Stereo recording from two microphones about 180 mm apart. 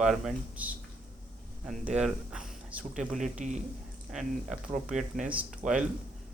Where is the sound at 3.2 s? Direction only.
40° right (ahead or behind).